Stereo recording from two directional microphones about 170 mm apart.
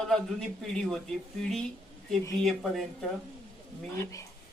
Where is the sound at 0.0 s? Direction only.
5° left (ahead or behind).